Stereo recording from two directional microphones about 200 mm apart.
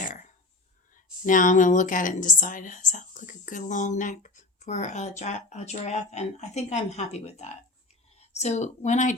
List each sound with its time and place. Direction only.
1.2 s a woman's voice: 40° left (ahead or behind)